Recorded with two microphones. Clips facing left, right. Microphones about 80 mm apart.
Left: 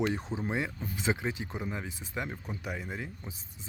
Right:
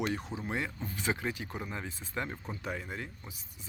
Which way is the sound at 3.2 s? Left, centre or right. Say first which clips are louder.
Left 4 dB; left.